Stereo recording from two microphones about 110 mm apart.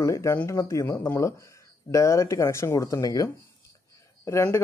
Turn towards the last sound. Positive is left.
turn(degrees=25)  # may be behind; listen again after turning